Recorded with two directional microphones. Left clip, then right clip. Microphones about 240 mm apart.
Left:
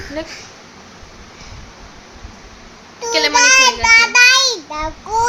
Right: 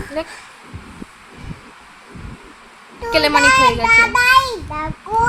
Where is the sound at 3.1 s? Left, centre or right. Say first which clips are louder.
Even; right.